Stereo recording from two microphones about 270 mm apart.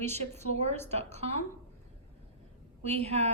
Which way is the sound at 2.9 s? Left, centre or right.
Right.